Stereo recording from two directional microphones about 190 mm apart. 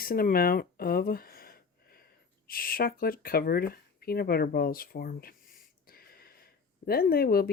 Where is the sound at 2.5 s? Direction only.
50° left (ahead or behind).